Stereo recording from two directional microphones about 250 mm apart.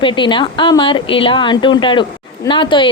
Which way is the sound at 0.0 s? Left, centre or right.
Centre.